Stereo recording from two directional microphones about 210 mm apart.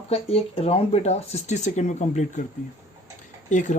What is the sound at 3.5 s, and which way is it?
Speech, 35° left (ahead or behind).